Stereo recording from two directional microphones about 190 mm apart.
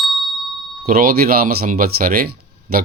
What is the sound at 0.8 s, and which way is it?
Speech, 50° right (ahead or behind).